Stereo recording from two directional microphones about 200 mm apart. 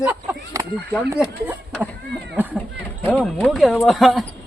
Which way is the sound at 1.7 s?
Centre (ahead or behind).